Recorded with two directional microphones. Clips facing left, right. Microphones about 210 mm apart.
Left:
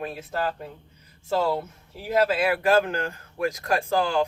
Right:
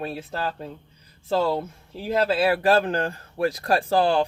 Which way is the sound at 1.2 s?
30° right (ahead or behind).